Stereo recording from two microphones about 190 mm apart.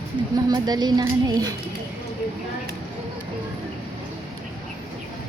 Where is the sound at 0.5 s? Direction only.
20° right (ahead or behind).